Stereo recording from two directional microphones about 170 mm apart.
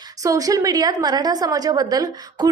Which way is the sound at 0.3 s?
20° right (ahead or behind).